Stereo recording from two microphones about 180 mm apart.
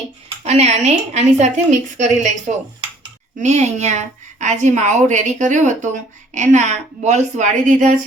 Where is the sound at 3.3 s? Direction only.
40° right (ahead or behind).